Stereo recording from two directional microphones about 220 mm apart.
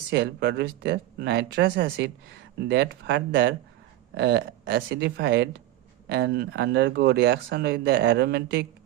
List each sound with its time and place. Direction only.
0.1 s speech: 50° right (ahead or behind)